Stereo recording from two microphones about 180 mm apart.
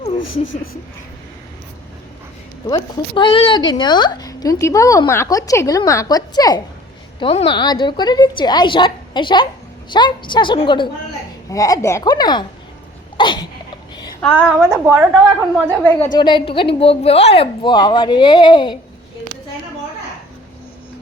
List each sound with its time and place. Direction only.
2.6 s a woman's voice: 25° left (ahead or behind)
13.1 s cough: 25° left (ahead or behind)
13.9 s a sound: 20° left (ahead or behind)
14.2 s a woman's voice: 5° left (ahead or behind)
14.7 s a woman's voice: 15° right (ahead or behind)
15.8 s a woman's voice: 10° left (ahead or behind)
16.1 s a woman's voice: 25° left (ahead or behind)